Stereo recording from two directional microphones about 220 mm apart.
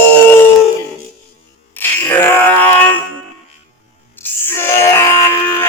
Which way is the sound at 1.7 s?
10° left (ahead or behind).